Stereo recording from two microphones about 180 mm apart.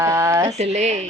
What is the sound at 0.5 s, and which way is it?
Speech, 40° right (ahead or behind).